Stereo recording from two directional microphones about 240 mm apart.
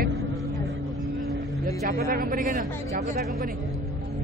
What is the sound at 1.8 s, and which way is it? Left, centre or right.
A man's voice, right.